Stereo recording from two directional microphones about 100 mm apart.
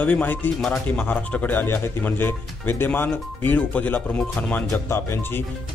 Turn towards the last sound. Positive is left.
turn(degrees=25)  # may be behind; listen again after turning